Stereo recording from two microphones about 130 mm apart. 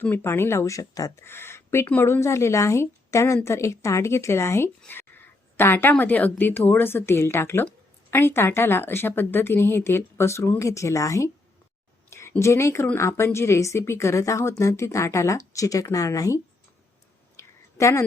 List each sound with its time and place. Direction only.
0.0 s a woman's voice: 15° left (ahead or behind)
12.4 s speech: 20° left (ahead or behind)
17.3 s a sound: 25° left (ahead or behind)